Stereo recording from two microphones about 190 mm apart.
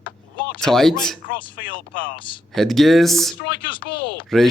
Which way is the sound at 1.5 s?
45° left (ahead or behind).